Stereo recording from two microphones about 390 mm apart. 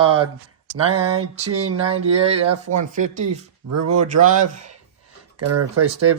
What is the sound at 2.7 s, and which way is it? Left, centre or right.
Speech, centre.